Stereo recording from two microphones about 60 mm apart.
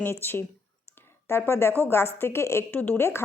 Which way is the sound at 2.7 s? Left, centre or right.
Left.